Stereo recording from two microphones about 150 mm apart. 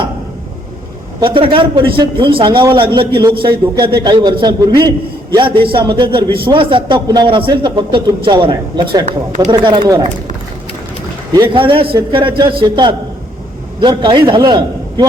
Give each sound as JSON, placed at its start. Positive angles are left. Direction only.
{"t": 1.2, "sound": "a man's voice", "side_deg": -35}
{"t": 9.0, "sound": "speech", "side_deg": -55}
{"t": 9.5, "sound": "a man's voice", "side_deg": -30}
{"t": 11.3, "sound": "a man's voice", "side_deg": -35}